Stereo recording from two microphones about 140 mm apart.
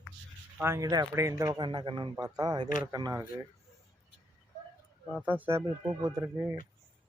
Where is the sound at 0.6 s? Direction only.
20° right (ahead or behind).